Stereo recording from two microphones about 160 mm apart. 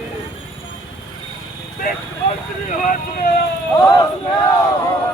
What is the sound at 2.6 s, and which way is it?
Speech, 55° left (ahead or behind).